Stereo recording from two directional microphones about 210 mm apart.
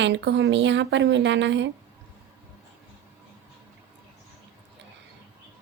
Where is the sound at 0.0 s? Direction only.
55° right (ahead or behind).